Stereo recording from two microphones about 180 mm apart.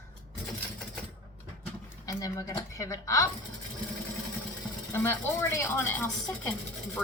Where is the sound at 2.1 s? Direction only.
20° left (ahead or behind).